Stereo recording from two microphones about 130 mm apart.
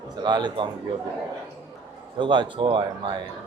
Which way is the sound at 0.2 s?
35° right (ahead or behind).